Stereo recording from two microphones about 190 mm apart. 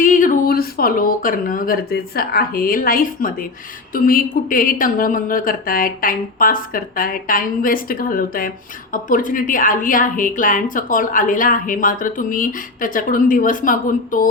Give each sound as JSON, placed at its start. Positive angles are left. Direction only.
{"t": 0.0, "sound": "speech", "side_deg": 45}